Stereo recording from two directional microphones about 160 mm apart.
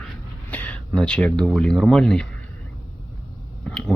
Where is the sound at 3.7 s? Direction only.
5° left (ahead or behind).